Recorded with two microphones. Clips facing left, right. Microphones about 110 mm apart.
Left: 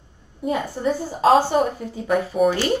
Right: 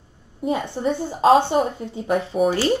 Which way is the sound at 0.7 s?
Centre (ahead or behind).